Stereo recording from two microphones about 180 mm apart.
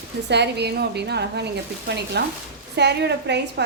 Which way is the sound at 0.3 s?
70° right (ahead or behind).